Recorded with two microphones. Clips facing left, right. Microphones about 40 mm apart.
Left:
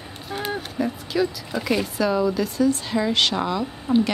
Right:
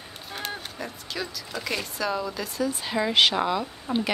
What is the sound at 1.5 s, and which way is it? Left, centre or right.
A woman's voice, centre.